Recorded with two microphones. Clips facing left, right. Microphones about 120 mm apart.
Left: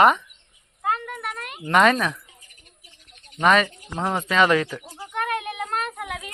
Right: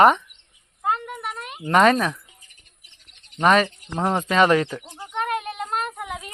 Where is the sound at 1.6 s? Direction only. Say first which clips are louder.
Right 1 dB; 35° right (ahead or behind).